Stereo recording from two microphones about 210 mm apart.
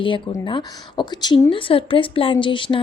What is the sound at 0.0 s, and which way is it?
A woman's voice, 25° left (ahead or behind).